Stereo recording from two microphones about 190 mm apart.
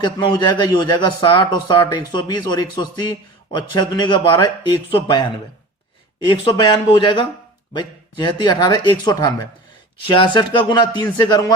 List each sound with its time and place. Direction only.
0.0 s speech: 25° left (ahead or behind)